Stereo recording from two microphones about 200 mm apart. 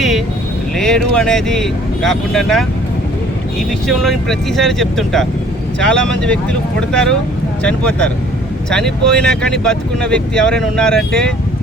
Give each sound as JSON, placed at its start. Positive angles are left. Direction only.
{"t": 0.8, "sound": "speech", "side_deg": 5}
{"t": 3.8, "sound": "speech", "side_deg": 0}